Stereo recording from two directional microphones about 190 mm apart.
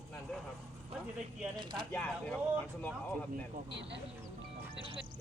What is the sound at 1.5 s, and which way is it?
Speech, 25° right (ahead or behind).